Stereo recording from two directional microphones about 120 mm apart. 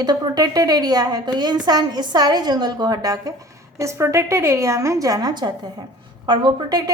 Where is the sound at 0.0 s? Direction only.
35° right (ahead or behind).